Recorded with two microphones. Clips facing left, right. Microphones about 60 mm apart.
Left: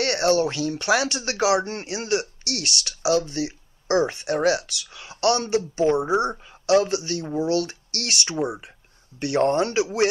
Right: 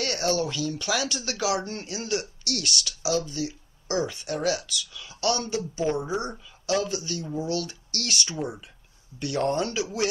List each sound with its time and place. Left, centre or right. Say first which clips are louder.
0.0 s speech: left 6 dB; left
1.4 s speech: left 7 dB; left
3.0 s speech: left 6 dB; left
5.8 s speech: left 6 dB; centre
6.6 s speech: left 7 dB; left